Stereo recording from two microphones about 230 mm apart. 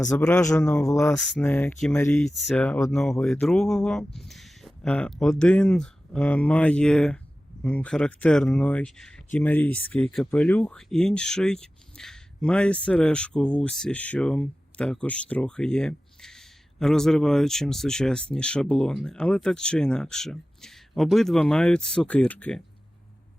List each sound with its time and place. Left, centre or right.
0.3 s speech: centre